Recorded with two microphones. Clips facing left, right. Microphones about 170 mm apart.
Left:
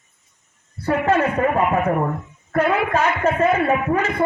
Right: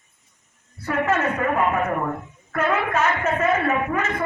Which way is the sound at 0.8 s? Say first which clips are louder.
Left 4 dB; 35° left (ahead or behind).